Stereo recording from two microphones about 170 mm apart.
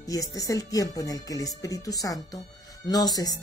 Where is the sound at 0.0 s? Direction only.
20° left (ahead or behind).